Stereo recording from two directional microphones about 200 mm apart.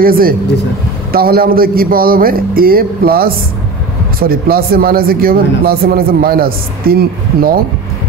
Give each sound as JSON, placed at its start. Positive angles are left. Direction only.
{"t": 0.0, "sound": "speech", "side_deg": -45}